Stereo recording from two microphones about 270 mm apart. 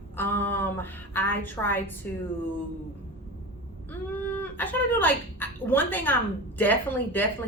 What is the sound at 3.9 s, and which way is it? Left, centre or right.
Speech, centre.